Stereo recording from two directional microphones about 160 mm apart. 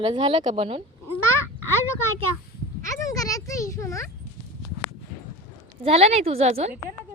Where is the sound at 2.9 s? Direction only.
20° left (ahead or behind).